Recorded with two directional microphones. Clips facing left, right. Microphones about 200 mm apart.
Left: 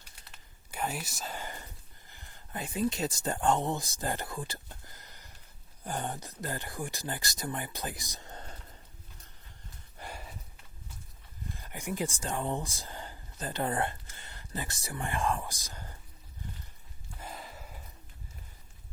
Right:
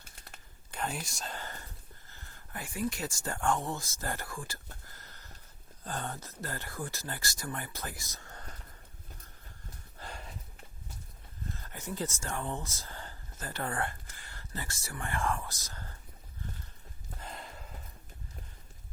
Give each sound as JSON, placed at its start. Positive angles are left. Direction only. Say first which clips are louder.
{"t": 0.7, "sound": "speech", "louder": "left 1 dB", "side_deg": 10}
{"t": 1.4, "sound": "whispering", "louder": "left 2 dB", "side_deg": 15}
{"t": 2.0, "sound": "speech", "louder": "left 1 dB", "side_deg": 15}
{"t": 10.0, "sound": "horse", "louder": "left 1 dB", "side_deg": 5}
{"t": 11.5, "sound": "speech", "louder": "left 4 dB", "side_deg": 15}
{"t": 17.2, "sound": "sniff", "louder": "left 1 dB", "side_deg": 5}